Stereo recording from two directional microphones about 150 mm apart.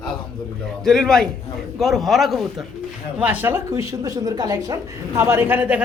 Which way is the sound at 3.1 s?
10° right (ahead or behind).